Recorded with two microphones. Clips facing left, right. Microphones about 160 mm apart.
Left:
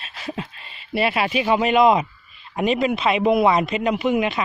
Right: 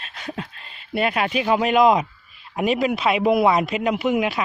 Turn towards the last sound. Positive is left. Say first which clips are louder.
# left 1 dB
turn(degrees=0)  # may be behind; listen again after turning